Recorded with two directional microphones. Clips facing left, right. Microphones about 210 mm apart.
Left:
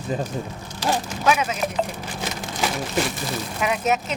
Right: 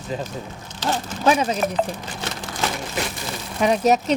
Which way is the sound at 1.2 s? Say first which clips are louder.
Right 3 dB; 35° right (ahead or behind).